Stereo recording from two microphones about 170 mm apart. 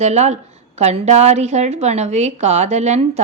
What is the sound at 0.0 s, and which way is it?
A woman's voice, 40° right (ahead or behind).